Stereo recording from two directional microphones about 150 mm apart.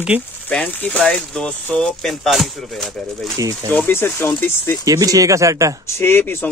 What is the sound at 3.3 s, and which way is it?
Speech, 20° right (ahead or behind).